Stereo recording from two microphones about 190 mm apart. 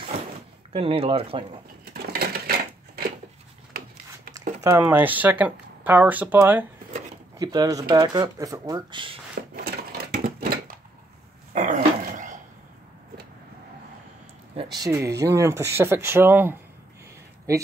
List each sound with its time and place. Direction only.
0.7 s speech: 30° right (ahead or behind)
2.0 s typewriter: 55° right (ahead or behind)
4.6 s speech: 10° right (ahead or behind)
7.3 s speech: 20° right (ahead or behind)
9.6 s crushing: 55° right (ahead or behind)
11.5 s dog: 40° right (ahead or behind)
14.5 s speech: 25° right (ahead or behind)